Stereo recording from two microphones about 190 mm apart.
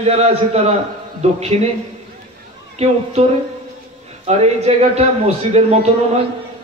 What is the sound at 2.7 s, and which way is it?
A man's voice, 35° right (ahead or behind).